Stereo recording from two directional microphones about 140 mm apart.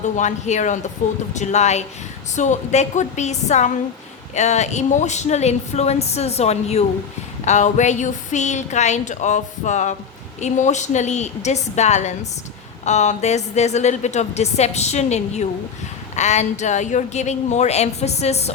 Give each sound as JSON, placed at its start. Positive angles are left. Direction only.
{"t": 0.0, "sound": "a woman's voice", "side_deg": 60}